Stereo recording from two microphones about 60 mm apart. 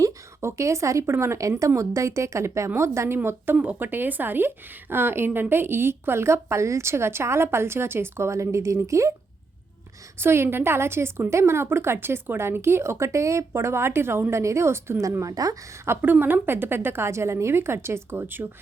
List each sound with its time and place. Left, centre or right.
0.0 s a woman's voice: right
2.6 s a woman's voice: right
3.2 s a woman's voice: right
10.2 s a woman's voice: right
15.2 s a woman's voice: right
15.9 s a woman's voice: right
16.2 s a woman's voice: right